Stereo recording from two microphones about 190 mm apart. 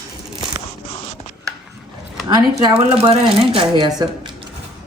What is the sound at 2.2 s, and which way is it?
Speech, 20° right (ahead or behind).